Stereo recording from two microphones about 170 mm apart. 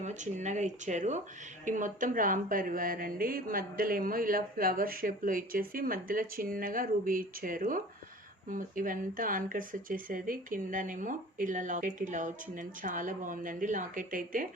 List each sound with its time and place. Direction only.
0.0 s a woman's voice: 45° right (ahead or behind)